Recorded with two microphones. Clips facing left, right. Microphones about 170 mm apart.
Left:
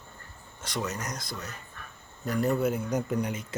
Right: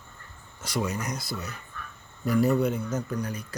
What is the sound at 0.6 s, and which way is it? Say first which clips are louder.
Speech: right 4 dB; 10° right (ahead or behind).